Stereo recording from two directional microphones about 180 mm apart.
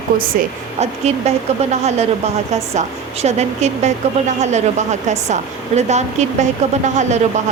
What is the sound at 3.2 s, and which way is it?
A woman's voice, 40° right (ahead or behind).